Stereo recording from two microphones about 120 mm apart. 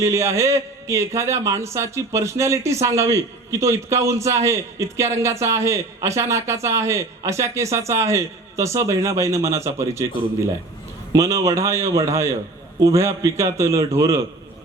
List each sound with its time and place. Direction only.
0.0 s a man's voice: 25° right (ahead or behind)
11.1 s a man's voice: 25° right (ahead or behind)